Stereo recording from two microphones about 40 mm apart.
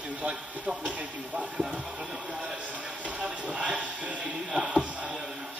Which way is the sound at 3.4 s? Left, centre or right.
Right.